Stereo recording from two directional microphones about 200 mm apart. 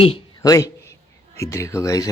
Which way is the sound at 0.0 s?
25° left (ahead or behind).